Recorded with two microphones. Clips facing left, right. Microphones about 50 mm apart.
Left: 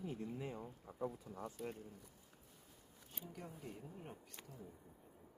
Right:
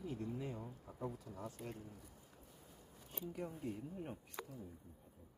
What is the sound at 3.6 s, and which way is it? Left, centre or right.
Speech, centre.